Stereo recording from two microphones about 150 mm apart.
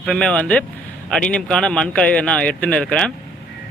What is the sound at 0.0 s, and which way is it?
Speech, 5° left (ahead or behind).